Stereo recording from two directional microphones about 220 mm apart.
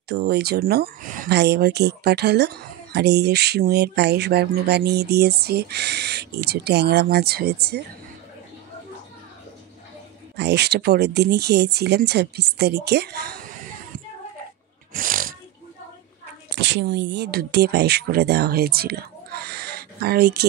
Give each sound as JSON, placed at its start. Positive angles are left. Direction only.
{"t": 0.1, "sound": "speech", "side_deg": -50}
{"t": 10.3, "sound": "speech", "side_deg": -50}
{"t": 15.0, "sound": "snoring", "side_deg": -40}
{"t": 16.5, "sound": "speech", "side_deg": -50}